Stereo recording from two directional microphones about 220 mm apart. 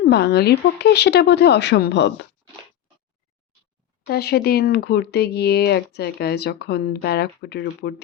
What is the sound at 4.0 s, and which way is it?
Speech, 50° left (ahead or behind).